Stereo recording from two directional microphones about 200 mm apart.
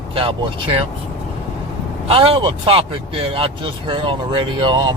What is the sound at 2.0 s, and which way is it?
Speech, 30° right (ahead or behind).